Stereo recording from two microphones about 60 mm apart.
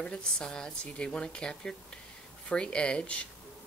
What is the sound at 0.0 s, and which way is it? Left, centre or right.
Speech, centre.